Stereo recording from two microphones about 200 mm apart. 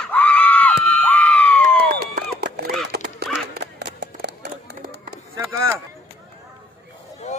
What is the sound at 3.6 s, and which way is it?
Music, 55° right (ahead or behind).